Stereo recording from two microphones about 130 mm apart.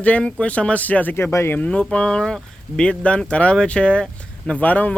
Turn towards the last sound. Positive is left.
turn(degrees=10)  # may be behind; listen again after turning